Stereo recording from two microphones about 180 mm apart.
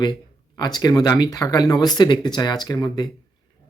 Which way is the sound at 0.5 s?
20° left (ahead or behind).